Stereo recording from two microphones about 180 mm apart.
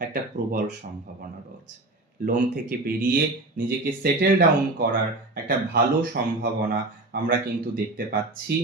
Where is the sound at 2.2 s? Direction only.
50° right (ahead or behind).